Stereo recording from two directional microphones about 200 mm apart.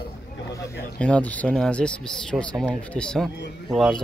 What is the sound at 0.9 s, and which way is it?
Speech, 5° left (ahead or behind).